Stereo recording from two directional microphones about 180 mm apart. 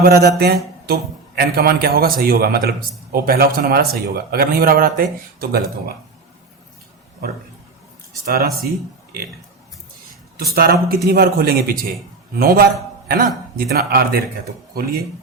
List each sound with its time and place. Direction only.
0.0 s speech: 60° right (ahead or behind)
8.2 s speech: 55° right (ahead or behind)
10.4 s a man's voice: 60° right (ahead or behind)